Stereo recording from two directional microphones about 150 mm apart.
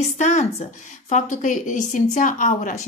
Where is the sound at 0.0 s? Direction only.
50° left (ahead or behind).